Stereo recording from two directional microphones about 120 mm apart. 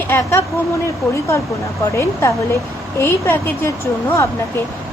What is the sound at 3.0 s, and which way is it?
Speech, 20° left (ahead or behind).